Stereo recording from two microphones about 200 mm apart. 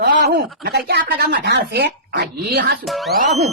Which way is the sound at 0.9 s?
50° right (ahead or behind).